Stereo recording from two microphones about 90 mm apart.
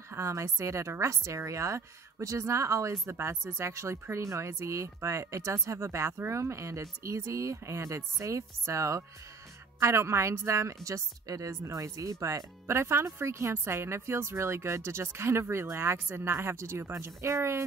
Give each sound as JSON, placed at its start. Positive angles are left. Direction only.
{"t": 0.1, "sound": "a woman's voice", "side_deg": -35}